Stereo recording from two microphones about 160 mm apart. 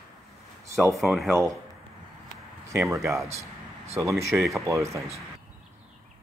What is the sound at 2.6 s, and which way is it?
Speech, 20° right (ahead or behind).